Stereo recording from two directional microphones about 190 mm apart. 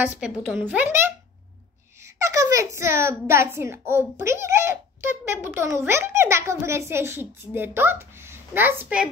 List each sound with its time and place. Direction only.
0.0 s a child's voice: 10° right (ahead or behind)
2.1 s a child's voice: 15° right (ahead or behind)